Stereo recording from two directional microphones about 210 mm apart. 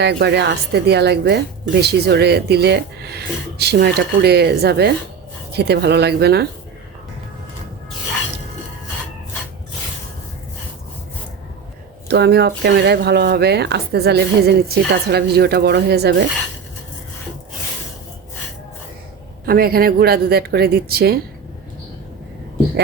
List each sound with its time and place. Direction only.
0.0 s speech: 55° right (ahead or behind)
12.0 s speech: 50° right (ahead or behind)
19.5 s speech: 45° right (ahead or behind)